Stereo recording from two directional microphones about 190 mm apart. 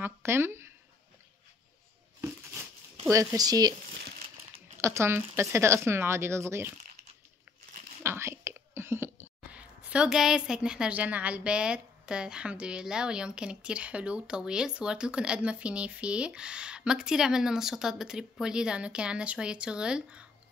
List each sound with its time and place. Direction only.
0.0 s speech: 10° right (ahead or behind)
2.2 s a sound: 15° right (ahead or behind)
3.1 s speech: 15° right (ahead or behind)
4.8 s speech: 15° right (ahead or behind)
8.0 s speech: 15° right (ahead or behind)